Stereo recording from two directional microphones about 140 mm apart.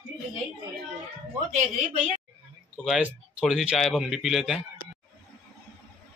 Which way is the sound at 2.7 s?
Centre (ahead or behind).